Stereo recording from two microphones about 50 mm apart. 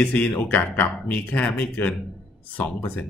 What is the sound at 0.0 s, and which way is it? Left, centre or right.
Speech, left.